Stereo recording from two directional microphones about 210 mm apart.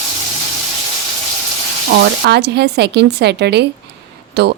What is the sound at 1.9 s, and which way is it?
A woman's voice, 50° right (ahead or behind).